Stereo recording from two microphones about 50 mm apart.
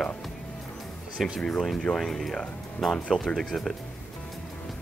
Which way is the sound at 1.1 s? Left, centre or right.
Centre.